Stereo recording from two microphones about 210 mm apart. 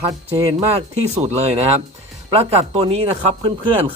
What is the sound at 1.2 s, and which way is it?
A man's voice, 35° right (ahead or behind).